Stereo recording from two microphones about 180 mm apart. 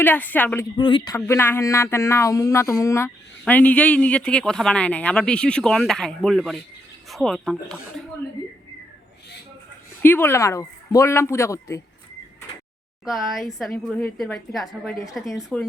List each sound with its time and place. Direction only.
0.0 s speech: 10° left (ahead or behind)
0.8 s speech: 25° left (ahead or behind)
1.1 s a woman's voice: 15° left (ahead or behind)
10.0 s speech: 10° left (ahead or behind)
13.1 s a woman's voice: centre (ahead or behind)